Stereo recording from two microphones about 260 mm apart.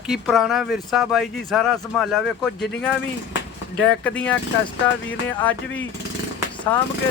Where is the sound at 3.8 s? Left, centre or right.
Centre.